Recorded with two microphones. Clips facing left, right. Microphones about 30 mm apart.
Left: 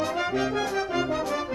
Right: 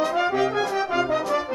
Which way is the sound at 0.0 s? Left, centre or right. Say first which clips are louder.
Right 5 dB; centre.